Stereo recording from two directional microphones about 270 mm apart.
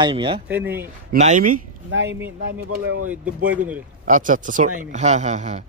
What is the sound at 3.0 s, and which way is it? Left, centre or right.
Speech, centre.